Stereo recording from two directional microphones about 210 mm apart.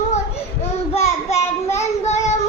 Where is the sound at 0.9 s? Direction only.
30° left (ahead or behind).